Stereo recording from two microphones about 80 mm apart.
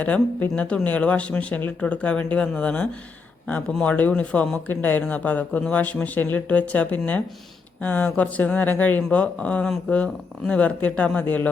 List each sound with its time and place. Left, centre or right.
0.0 s speech: centre